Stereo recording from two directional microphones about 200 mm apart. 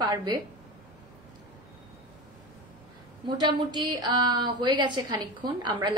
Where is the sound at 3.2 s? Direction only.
20° right (ahead or behind).